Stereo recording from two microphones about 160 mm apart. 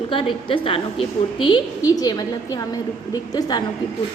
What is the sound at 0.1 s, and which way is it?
A woman's voice, 35° left (ahead or behind).